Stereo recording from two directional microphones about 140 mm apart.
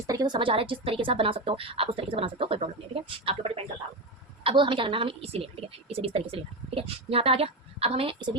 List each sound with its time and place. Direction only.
0.1 s a woman's voice: 30° right (ahead or behind)